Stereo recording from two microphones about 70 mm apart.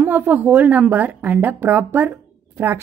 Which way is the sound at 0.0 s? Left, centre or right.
Right.